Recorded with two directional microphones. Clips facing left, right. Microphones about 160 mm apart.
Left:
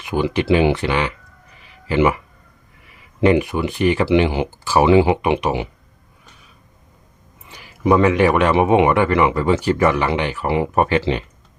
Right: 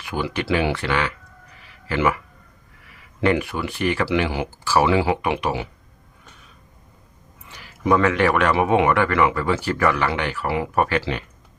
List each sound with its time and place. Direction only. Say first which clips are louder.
0.0 s speech: left 6 dB; 20° left (ahead or behind)
1.6 s a sound: left 5 dB; 20° left (ahead or behind)
3.2 s speech: left 5 dB; 20° left (ahead or behind)
7.4 s speech: left 4 dB; 15° left (ahead or behind)